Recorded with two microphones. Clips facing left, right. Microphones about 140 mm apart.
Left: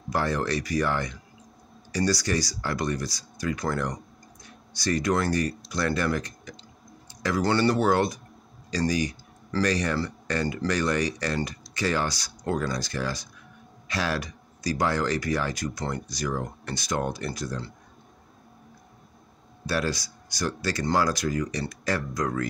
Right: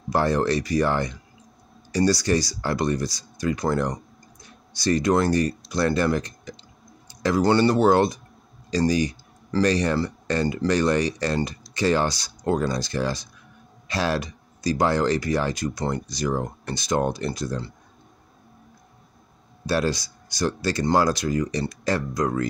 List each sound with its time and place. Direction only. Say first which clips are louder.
0.1 s speech: right 5 dB; 30° right (ahead or behind)
19.6 s speech: right 4 dB; 25° right (ahead or behind)